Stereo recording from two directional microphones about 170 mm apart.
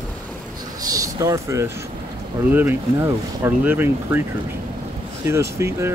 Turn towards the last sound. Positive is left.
turn(degrees=-15)  # may be behind; listen again after turning